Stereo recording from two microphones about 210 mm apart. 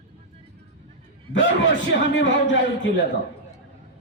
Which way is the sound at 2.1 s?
55° left (ahead or behind).